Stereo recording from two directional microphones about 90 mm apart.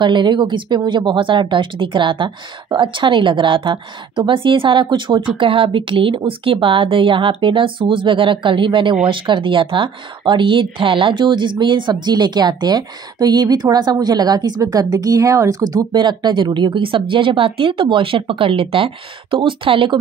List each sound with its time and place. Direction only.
0.0 s speech: 60° right (ahead or behind)
5.4 s a woman's voice: 75° right (ahead or behind)